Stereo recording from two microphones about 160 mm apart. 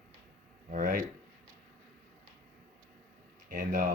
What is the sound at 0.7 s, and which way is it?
Speech, 55° right (ahead or behind).